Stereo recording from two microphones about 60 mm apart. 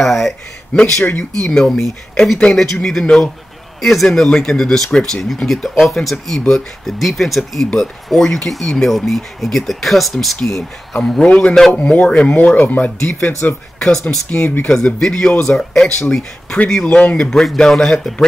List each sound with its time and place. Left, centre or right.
0.0 s speech: centre
0.9 s speech: left
1.4 s speech: centre
3.8 s speech: centre
7.0 s speech: centre
11.8 s speech: left
13.7 s speech: centre
14.4 s speech: left
14.7 s speech: centre
17.3 s speech: centre